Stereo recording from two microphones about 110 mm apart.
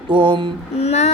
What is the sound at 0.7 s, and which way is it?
Child singing, 75° left (ahead or behind).